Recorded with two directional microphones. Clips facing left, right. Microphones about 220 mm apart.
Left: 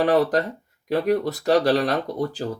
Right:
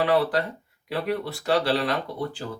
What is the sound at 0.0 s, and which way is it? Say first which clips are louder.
Speech: left 3 dB; 45° left (ahead or behind).